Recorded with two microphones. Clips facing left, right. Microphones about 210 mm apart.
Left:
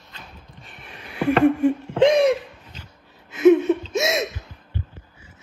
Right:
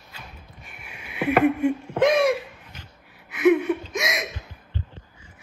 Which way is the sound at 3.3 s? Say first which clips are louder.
Left 4 dB; 25° left (ahead or behind).